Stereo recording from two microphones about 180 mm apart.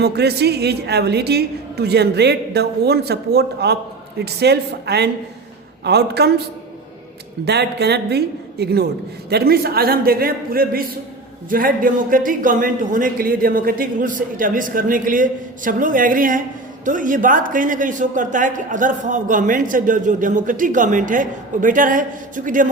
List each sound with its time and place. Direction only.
0.0 s a woman's voice: 65° right (ahead or behind)
7.4 s a woman's voice: 65° right (ahead or behind); by 22.6 s 45° right (ahead or behind)